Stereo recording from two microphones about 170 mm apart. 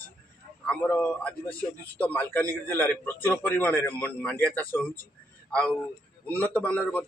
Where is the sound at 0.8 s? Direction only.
10° left (ahead or behind).